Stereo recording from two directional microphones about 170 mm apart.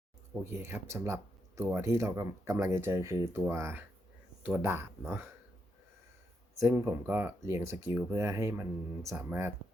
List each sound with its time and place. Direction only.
0.5 s speech: 15° right (ahead or behind)
6.6 s speech: 10° right (ahead or behind)